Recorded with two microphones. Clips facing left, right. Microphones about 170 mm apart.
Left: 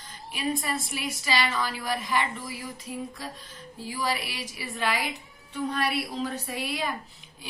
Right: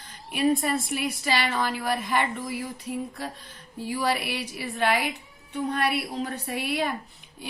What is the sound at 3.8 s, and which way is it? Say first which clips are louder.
A woman's voice: right 4 dB; 60° right (ahead or behind).